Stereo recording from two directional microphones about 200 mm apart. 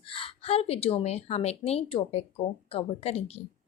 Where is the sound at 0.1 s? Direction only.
25° left (ahead or behind).